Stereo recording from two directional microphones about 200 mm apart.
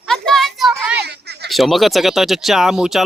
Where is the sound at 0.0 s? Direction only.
Centre (ahead or behind).